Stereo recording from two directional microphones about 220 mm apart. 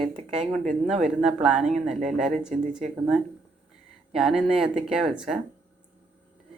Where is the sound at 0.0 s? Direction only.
25° right (ahead or behind).